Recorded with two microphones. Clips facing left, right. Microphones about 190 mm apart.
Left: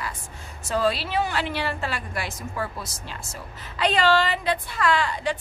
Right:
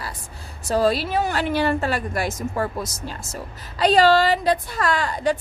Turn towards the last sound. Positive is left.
turn(degrees=-40)  # may be behind; listen again after turning